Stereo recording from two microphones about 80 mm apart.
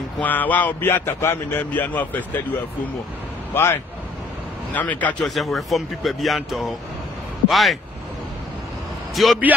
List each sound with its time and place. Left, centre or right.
0.2 s a man's voice: left
3.5 s a man's voice: left
4.7 s a man's voice: centre
5.2 s speech: centre
9.1 s a man's voice: centre